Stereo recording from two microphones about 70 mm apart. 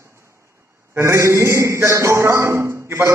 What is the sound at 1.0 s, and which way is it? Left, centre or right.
A man's voice, right.